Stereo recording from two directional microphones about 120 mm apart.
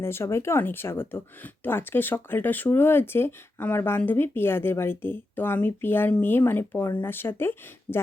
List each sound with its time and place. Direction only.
0.0 s speech: 20° left (ahead or behind)